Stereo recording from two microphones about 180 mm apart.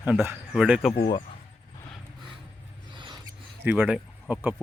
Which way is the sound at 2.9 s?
25° right (ahead or behind).